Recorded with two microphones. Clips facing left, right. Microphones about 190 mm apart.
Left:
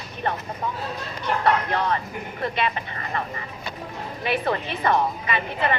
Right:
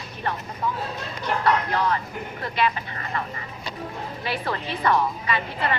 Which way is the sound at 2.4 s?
25° left (ahead or behind).